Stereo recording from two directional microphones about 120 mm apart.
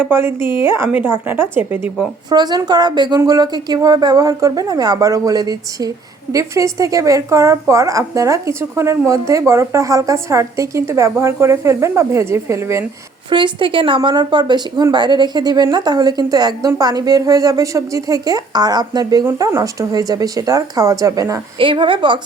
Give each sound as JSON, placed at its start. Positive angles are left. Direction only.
{"t": 0.0, "sound": "a woman's voice", "side_deg": -20}
{"t": 2.3, "sound": "a woman's voice", "side_deg": -35}
{"t": 13.3, "sound": "a woman's voice", "side_deg": -45}
{"t": 21.6, "sound": "speech", "side_deg": -45}